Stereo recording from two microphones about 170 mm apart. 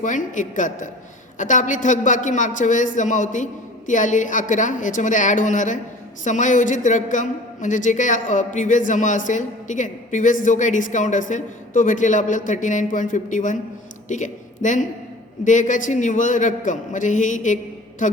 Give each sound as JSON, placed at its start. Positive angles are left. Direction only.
{"t": 0.0, "sound": "a woman's voice", "side_deg": 50}